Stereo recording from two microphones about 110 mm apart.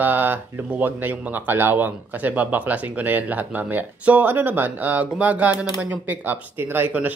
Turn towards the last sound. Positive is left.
turn(degrees=-15)  # may be behind; listen again after turning